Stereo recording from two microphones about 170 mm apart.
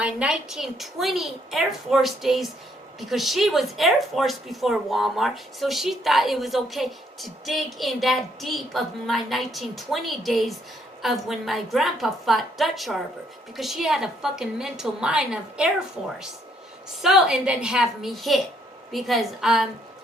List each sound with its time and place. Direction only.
0.0 s speech: 5° right (ahead or behind)